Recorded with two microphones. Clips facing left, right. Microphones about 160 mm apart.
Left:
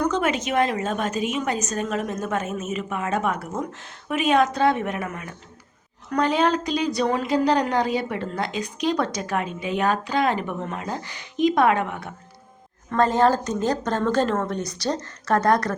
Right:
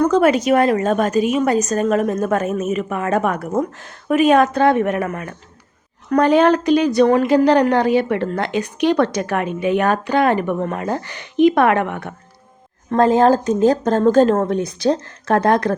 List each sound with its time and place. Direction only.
0.0 s a woman's voice: 55° right (ahead or behind)
4.4 s a woman's voice: 55° right (ahead or behind)
12.9 s a woman's voice: 50° right (ahead or behind)